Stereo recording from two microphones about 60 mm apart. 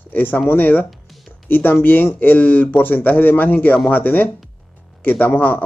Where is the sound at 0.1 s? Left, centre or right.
Left.